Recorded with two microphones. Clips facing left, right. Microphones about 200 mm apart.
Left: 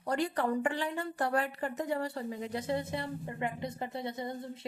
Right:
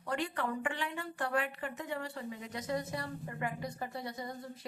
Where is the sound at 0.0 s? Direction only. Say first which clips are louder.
Left 5 dB; 35° left (ahead or behind).